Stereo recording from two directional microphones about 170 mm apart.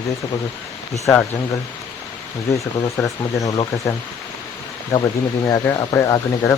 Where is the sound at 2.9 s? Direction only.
20° left (ahead or behind).